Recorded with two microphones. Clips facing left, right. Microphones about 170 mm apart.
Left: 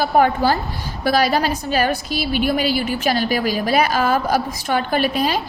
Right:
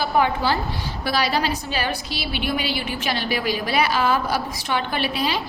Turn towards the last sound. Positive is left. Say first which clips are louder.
# left 5 dB
turn(degrees=45)  # may be behind; listen again after turning